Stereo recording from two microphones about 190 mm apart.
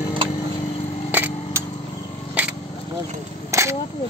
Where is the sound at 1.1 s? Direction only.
10° right (ahead or behind).